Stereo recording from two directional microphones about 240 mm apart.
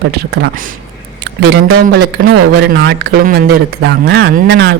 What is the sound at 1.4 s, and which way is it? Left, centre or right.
Speech, right.